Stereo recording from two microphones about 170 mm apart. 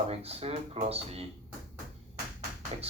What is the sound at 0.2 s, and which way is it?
Speech, 35° right (ahead or behind).